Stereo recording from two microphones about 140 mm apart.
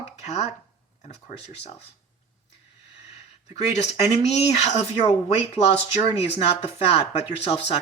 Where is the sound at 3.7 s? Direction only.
50° left (ahead or behind).